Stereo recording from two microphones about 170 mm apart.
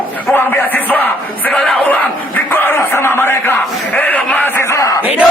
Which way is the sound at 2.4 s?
10° left (ahead or behind).